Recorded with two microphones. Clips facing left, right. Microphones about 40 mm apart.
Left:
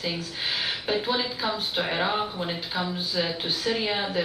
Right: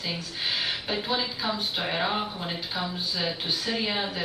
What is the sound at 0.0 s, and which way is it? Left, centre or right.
Speech, centre.